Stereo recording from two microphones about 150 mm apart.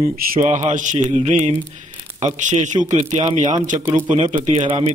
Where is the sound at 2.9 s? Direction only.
50° right (ahead or behind).